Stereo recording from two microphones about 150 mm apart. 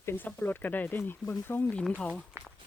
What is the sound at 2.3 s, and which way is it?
Walk, 15° right (ahead or behind).